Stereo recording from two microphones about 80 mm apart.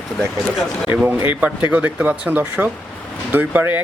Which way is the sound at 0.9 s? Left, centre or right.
Right.